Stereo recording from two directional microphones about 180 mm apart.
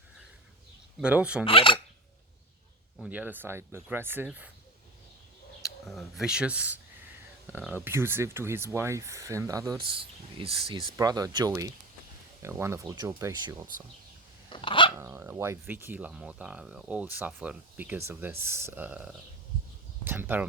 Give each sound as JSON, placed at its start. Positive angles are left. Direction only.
{"t": 1.0, "sound": "speech", "side_deg": -5}
{"t": 1.5, "sound": "speech", "side_deg": 30}
{"t": 3.0, "sound": "speech", "side_deg": -10}
{"t": 5.8, "sound": "speech", "side_deg": 0}
{"t": 10.3, "sound": "speech", "side_deg": -30}
{"t": 14.5, "sound": "dog", "side_deg": 25}
{"t": 14.9, "sound": "speech", "side_deg": -15}